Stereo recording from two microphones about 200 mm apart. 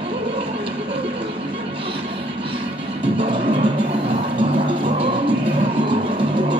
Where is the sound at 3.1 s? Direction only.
25° right (ahead or behind).